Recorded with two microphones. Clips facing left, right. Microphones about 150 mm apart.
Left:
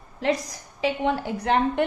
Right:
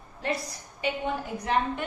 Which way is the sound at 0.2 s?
90° left.